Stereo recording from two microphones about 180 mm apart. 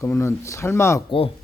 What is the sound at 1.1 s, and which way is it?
Speech, 30° left (ahead or behind).